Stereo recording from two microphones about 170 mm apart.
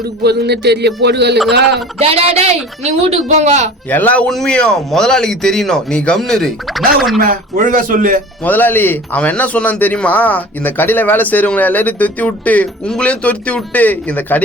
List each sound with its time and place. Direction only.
0.2 s speech: 75° right (ahead or behind)
2.0 s a man's voice: 35° right (ahead or behind)
3.8 s speech: 10° left (ahead or behind)
7.2 s speech: 55° right (ahead or behind)
8.4 s a man's voice: 10° left (ahead or behind)